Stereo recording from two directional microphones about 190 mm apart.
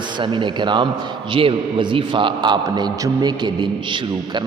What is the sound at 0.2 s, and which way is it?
A man's voice, 25° right (ahead or behind).